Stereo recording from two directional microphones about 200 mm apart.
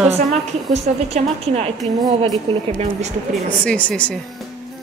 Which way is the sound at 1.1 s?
30° right (ahead or behind).